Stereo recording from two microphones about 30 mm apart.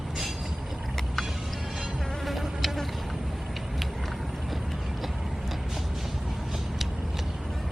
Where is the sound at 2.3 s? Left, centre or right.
Centre.